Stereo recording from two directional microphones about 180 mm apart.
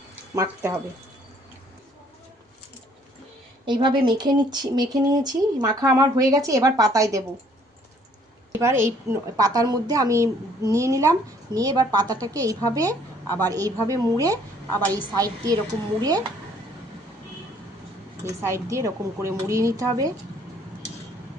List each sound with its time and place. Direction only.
0.3 s speech: 15° right (ahead or behind)
3.7 s a woman's voice: 25° right (ahead or behind)
8.5 s a woman's voice: 15° right (ahead or behind)
18.4 s speech: 15° right (ahead or behind)